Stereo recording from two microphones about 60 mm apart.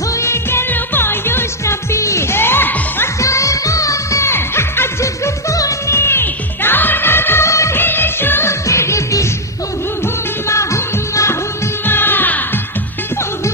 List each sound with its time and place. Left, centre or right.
0.2 s music: left
3.2 s music: left
4.3 s music: left
5.0 s music: left
7.4 s music: left
7.7 s music: left
8.6 s music: left
11.8 s music: left